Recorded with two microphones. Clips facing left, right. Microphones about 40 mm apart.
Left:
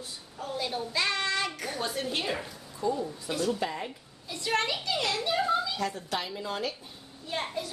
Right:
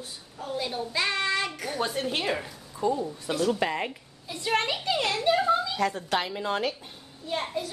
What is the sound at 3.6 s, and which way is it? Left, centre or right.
Speech, right.